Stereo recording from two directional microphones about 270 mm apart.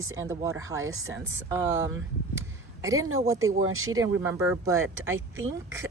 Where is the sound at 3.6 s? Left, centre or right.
Right.